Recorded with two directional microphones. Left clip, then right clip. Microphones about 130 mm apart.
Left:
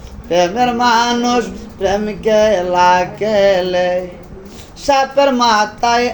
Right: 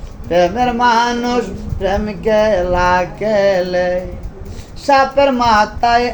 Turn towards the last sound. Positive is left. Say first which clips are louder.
# right 1 dB
turn(degrees=20)  # may be behind; listen again after turning